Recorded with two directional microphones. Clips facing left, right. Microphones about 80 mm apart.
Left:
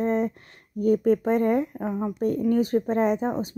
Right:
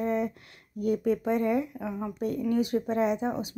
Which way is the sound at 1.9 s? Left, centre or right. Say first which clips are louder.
Left 6 dB; left.